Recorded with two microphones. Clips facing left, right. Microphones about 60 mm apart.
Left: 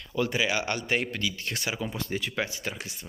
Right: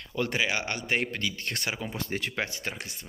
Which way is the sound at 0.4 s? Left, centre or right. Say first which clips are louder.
Left 1 dB; right.